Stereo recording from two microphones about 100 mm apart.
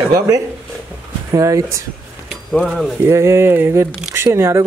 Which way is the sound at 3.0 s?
30° right (ahead or behind).